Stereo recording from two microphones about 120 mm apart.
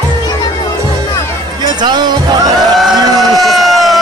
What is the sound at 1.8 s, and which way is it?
Music, 40° right (ahead or behind).